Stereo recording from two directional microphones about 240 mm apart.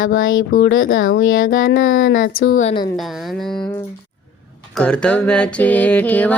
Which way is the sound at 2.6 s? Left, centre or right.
Left.